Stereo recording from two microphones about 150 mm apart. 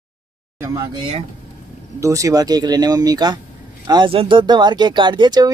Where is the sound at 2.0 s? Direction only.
20° right (ahead or behind).